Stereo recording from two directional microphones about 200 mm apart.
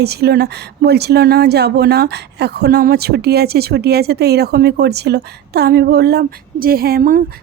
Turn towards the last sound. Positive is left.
turn(degrees=-45)  # may be behind; listen again after turning